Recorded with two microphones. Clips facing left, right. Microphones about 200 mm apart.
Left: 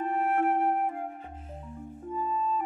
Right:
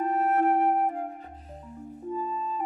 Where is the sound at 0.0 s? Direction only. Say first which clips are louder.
Right 3 dB; 40° right (ahead or behind).